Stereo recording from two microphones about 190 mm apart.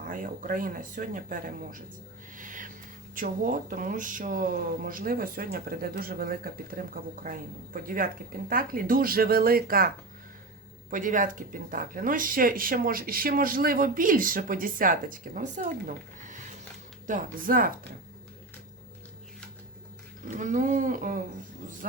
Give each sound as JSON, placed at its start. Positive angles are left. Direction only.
{"t": 0.0, "sound": "speech", "side_deg": -45}
{"t": 2.3, "sound": "a sound", "side_deg": -45}
{"t": 3.2, "sound": "speech", "side_deg": -45}
{"t": 10.9, "sound": "speech", "side_deg": -45}
{"t": 20.2, "sound": "speech", "side_deg": -40}